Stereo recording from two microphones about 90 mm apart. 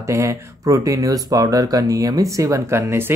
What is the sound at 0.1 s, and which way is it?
Speech, 30° right (ahead or behind).